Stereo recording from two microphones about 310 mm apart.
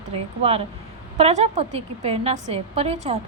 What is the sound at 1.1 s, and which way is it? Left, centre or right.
A woman's voice, centre.